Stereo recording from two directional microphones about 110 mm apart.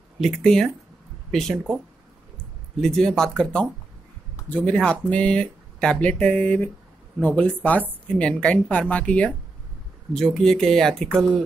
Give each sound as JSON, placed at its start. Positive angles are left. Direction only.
{"t": 0.2, "sound": "speech", "side_deg": 5}
{"t": 2.8, "sound": "speech", "side_deg": 5}